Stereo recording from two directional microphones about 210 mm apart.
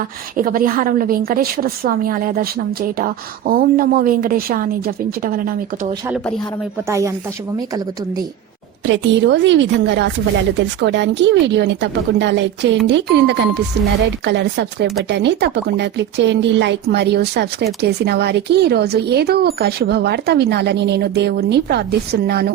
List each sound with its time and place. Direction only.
0.3 s speech: 40° right (ahead or behind)
6.8 s speech: 15° right (ahead or behind)
8.9 s speech: 55° right (ahead or behind)